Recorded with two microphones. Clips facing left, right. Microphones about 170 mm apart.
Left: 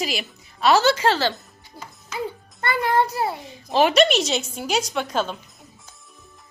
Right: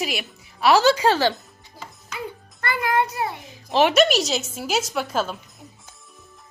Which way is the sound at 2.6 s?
25° left (ahead or behind).